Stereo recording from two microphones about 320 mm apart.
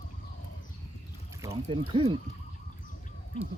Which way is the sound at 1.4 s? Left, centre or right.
Centre.